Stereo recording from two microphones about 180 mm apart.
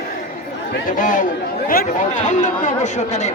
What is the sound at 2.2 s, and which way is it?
Speech, 40° left (ahead or behind).